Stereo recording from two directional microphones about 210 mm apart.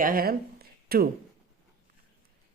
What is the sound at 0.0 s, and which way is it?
Speech, 45° right (ahead or behind).